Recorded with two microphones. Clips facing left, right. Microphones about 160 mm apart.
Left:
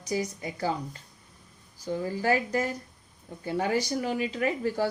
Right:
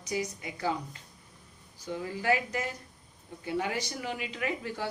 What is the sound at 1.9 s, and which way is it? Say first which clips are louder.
A woman's voice: left 3 dB; 35° left (ahead or behind).